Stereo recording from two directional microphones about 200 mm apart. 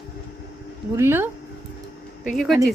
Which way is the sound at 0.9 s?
10° right (ahead or behind).